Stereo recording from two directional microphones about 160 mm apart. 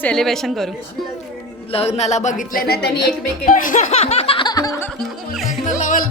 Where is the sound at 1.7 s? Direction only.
40° left (ahead or behind); by 2.9 s 70° left (ahead or behind).